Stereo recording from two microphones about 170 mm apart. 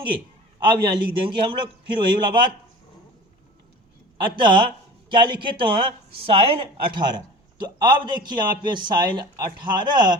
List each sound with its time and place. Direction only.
0.6 s a man's voice: 30° right (ahead or behind)
4.2 s a man's voice: 30° right (ahead or behind)